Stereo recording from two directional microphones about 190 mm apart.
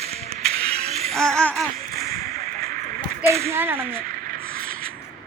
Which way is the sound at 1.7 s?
50° right (ahead or behind).